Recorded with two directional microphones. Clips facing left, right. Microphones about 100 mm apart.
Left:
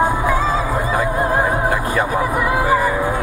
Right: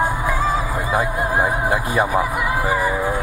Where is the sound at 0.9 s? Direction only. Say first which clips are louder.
Left 1 dB; 15° right (ahead or behind).